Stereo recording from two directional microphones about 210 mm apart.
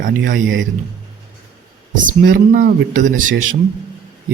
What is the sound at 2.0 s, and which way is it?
Speech, 40° right (ahead or behind).